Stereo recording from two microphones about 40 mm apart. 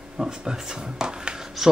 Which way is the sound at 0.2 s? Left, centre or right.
Centre.